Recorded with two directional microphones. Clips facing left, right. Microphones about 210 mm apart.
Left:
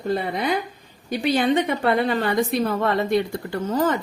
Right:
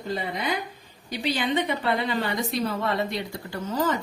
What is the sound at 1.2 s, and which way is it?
Speech, 50° left (ahead or behind).